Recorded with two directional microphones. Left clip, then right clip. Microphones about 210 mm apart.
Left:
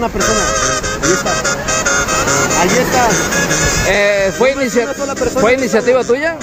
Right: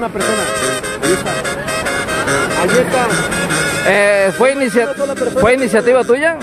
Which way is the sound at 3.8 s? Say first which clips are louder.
Right 3 dB; 15° right (ahead or behind).